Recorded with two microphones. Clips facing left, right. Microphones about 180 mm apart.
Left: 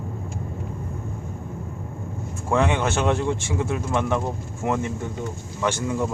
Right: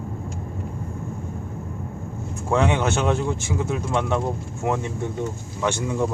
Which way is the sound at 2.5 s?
15° right (ahead or behind).